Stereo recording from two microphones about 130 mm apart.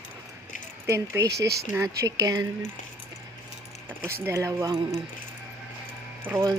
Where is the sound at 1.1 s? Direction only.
25° right (ahead or behind).